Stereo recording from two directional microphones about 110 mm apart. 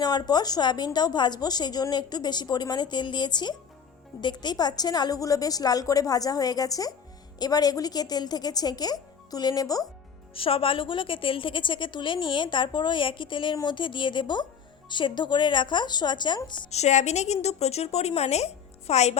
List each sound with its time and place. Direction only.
0.0 s a woman's voice: 40° left (ahead or behind)
10.3 s a woman's voice: 55° left (ahead or behind)
16.6 s a woman's voice: 90° left